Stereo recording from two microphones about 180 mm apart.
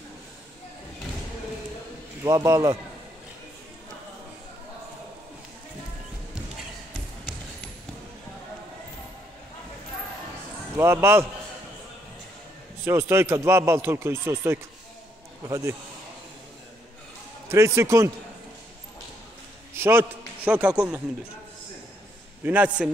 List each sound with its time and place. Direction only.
2.2 s a man's voice: 15° right (ahead or behind)
10.8 s a man's voice: 15° right (ahead or behind)
12.8 s a man's voice: 15° right (ahead or behind)
17.5 s a man's voice: 15° right (ahead or behind)
19.7 s a man's voice: 15° right (ahead or behind)
22.4 s a man's voice: 10° right (ahead or behind)